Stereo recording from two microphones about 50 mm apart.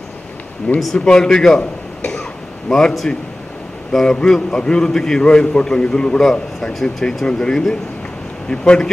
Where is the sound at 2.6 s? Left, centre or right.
Centre.